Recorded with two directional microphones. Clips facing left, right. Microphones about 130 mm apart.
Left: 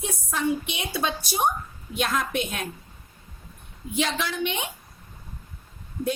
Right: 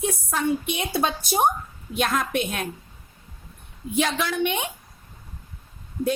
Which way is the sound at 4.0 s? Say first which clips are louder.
Right 3 dB; 50° right (ahead or behind).